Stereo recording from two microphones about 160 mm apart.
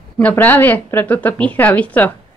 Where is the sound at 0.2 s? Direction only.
10° left (ahead or behind).